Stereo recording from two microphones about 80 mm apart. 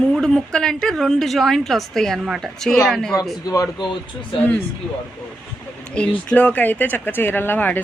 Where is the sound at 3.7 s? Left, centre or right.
Left.